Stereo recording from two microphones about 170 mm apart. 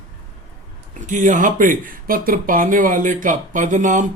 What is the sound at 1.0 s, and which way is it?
Speech, 50° right (ahead or behind).